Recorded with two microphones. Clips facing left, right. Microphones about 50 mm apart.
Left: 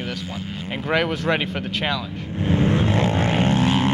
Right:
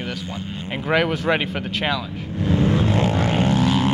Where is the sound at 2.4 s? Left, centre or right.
Left.